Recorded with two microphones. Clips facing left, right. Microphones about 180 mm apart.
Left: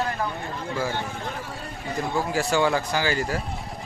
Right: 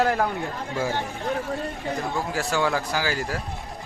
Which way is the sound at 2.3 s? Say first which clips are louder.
Left 2 dB; centre (ahead or behind).